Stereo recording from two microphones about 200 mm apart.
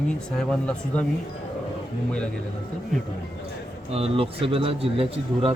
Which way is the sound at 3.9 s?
30° right (ahead or behind).